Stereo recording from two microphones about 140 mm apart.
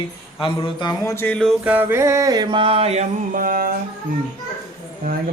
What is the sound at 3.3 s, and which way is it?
Mantra, 85° right.